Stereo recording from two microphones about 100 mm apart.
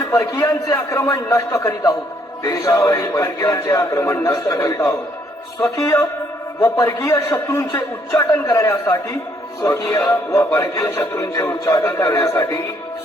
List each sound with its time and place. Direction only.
0.1 s speech: 30° left (ahead or behind)